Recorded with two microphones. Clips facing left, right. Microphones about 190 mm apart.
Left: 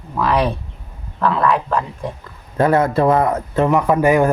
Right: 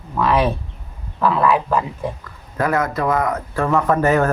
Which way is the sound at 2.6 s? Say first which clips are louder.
Left 5 dB; 30° left (ahead or behind).